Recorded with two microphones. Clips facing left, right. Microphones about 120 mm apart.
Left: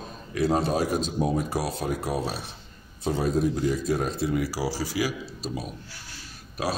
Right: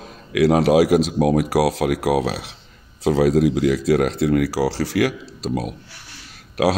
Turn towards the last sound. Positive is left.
turn(degrees=-80)